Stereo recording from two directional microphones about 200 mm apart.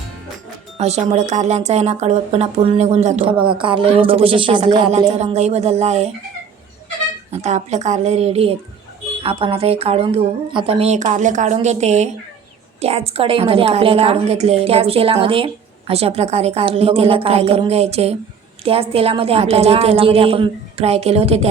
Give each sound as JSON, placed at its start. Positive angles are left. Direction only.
{"t": 0.8, "sound": "a woman's voice", "side_deg": -35}
{"t": 7.3, "sound": "a woman's voice", "side_deg": -35}